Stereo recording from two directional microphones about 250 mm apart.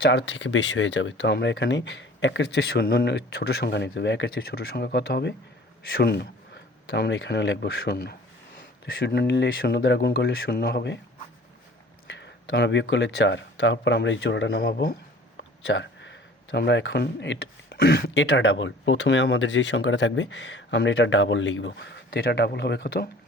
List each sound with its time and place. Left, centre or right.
0.0 s speech: left
12.0 s speech: left